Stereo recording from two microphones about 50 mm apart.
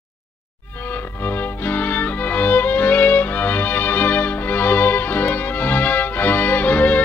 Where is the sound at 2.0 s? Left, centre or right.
Left.